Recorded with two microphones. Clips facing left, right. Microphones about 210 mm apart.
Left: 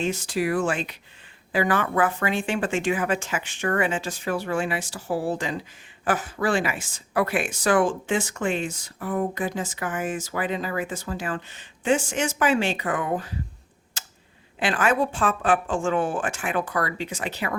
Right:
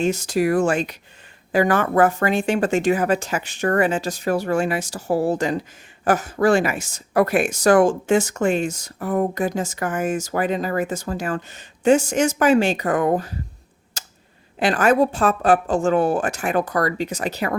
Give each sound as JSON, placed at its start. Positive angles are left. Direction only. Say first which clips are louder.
{"t": 0.0, "sound": "speech", "louder": "right 5 dB", "side_deg": -45}
{"t": 14.0, "sound": "a sound", "louder": "right 3 dB", "side_deg": -40}
{"t": 14.6, "sound": "speech", "louder": "right 6 dB", "side_deg": -40}